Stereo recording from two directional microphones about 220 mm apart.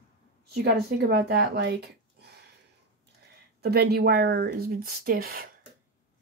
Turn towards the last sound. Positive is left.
turn(degrees=-40)  # may be behind; listen again after turning